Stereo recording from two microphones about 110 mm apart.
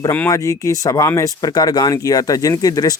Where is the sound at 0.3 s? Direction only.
30° left (ahead or behind).